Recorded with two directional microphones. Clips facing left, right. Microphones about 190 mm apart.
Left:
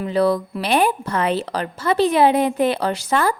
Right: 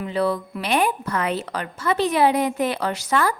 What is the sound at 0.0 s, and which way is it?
Speech, 40° left (ahead or behind).